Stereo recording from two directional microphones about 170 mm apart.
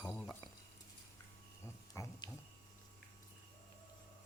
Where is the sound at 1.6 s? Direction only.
20° left (ahead or behind).